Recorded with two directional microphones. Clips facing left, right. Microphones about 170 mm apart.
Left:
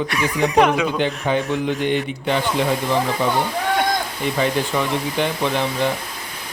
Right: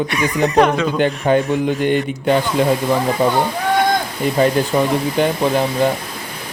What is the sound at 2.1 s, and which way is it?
Speech, 45° right (ahead or behind).